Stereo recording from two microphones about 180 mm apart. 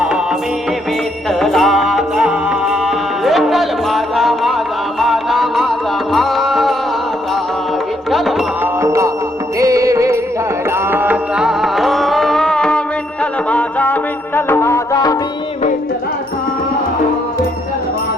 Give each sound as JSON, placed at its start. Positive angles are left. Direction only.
{"t": 1.3, "sound": "music", "side_deg": 0}
{"t": 8.1, "sound": "music", "side_deg": 0}
{"t": 8.6, "sound": "music", "side_deg": -15}